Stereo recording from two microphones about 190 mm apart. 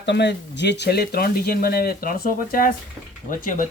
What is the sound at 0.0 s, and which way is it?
Speech, 65° left (ahead or behind).